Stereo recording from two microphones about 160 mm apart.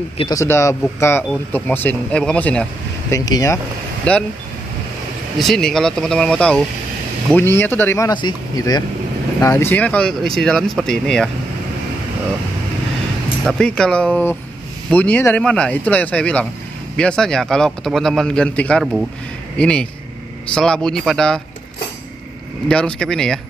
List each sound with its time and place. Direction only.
0.3 s speech: 20° left (ahead or behind)
3.1 s speech: 20° left (ahead or behind)
4.1 s speech: 10° left (ahead or behind)
5.4 s speech: 5° left (ahead or behind)
8.1 s speech: 30° left (ahead or behind); by 11.2 s 5° left (ahead or behind)
13.5 s speech: 5° left (ahead or behind)
22.7 s speech: 5° left (ahead or behind)